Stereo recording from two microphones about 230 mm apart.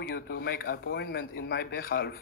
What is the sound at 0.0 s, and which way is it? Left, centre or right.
Speech, left.